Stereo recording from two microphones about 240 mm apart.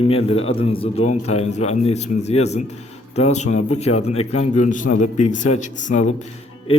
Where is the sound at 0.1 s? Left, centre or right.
Left.